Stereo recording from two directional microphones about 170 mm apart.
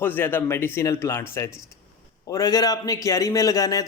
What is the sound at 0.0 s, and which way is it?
A man's voice, 10° left (ahead or behind).